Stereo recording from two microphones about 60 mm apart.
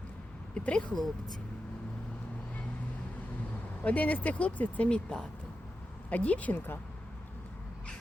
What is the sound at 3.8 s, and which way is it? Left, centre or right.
Speech, left.